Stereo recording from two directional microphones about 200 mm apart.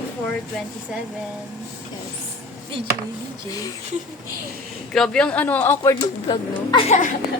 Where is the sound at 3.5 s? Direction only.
15° left (ahead or behind).